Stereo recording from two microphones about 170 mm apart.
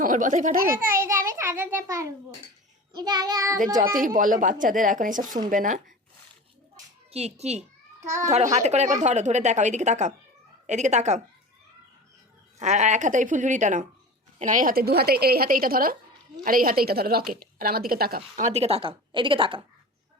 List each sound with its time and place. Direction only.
0.0 s a child's voice: 50° right (ahead or behind)
0.7 s a child's voice: 15° right (ahead or behind)
2.9 s child singing: 25° right (ahead or behind)
3.9 s a child's voice: 50° right (ahead or behind)
7.1 s a woman's voice: 40° right (ahead or behind)
8.0 s a child's voice: 15° right (ahead or behind)
8.3 s a woman's voice: 40° right (ahead or behind)
12.5 s a child's voice: 45° right (ahead or behind); by 18.2 s 60° right (ahead or behind)
18.3 s a woman's voice: 40° right (ahead or behind)